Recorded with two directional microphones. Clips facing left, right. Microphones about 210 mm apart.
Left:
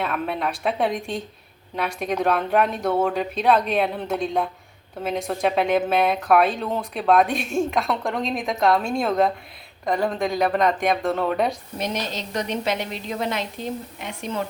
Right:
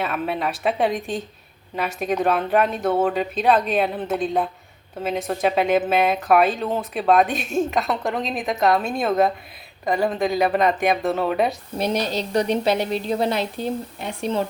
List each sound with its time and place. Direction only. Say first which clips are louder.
0.0 s speech: right 1 dB; 5° right (ahead or behind)
11.8 s a woman's voice: right 6 dB; 35° right (ahead or behind)